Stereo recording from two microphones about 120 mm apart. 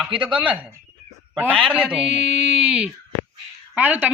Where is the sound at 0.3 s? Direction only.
10° right (ahead or behind).